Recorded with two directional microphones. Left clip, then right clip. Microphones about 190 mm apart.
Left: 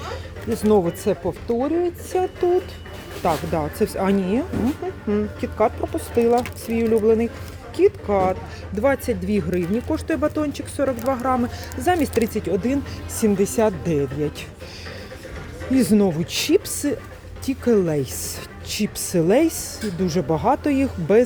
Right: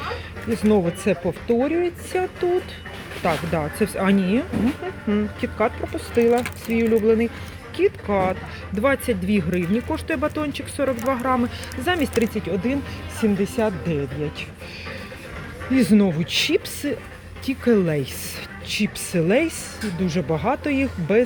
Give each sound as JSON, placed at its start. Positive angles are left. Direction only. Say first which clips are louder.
{"t": 0.0, "sound": "speech", "louder": "right 2 dB", "side_deg": 10}
{"t": 3.2, "sound": "speech", "louder": "left 1 dB", "side_deg": 5}
{"t": 15.7, "sound": "speech", "louder": "left 1 dB", "side_deg": 15}